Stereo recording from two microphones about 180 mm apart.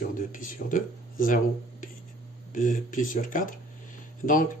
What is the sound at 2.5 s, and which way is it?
Speech, 45° left (ahead or behind).